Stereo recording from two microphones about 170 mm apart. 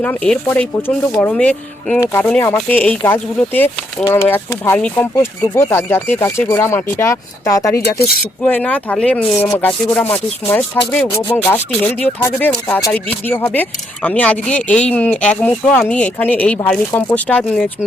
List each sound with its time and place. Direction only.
0.0 s speech: 10° left (ahead or behind)
12.2 s speech: 15° left (ahead or behind)